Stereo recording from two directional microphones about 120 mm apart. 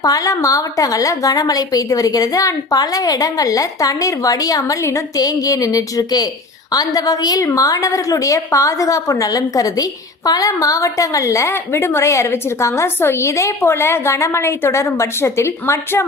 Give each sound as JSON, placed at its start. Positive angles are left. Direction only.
{"t": 0.0, "sound": "a woman's voice", "side_deg": 30}